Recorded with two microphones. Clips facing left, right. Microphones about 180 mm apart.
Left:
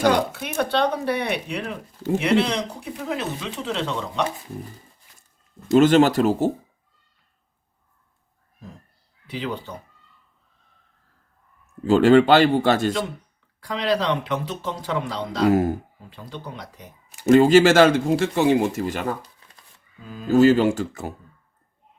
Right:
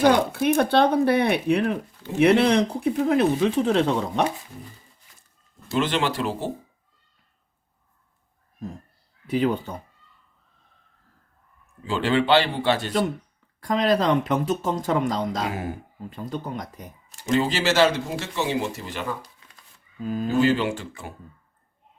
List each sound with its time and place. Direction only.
0.3 s speech: 50° right (ahead or behind)
5.7 s speech: 45° left (ahead or behind)
9.3 s speech: 50° right (ahead or behind)
11.6 s speech: 45° left (ahead or behind)
13.6 s speech: 45° right (ahead or behind)
15.4 s speech: 40° left (ahead or behind)
16.0 s speech: 45° right (ahead or behind)
17.2 s speech: 50° left (ahead or behind)
20.3 s speech: 45° left (ahead or behind)